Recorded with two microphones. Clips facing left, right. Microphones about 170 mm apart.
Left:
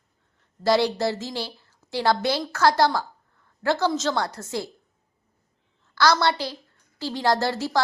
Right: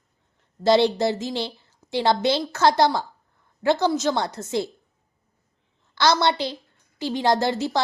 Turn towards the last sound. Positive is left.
turn(degrees=-20)  # may be behind; listen again after turning